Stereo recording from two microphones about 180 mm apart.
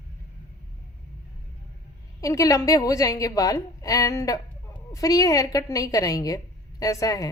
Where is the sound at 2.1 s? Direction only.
20° left (ahead or behind).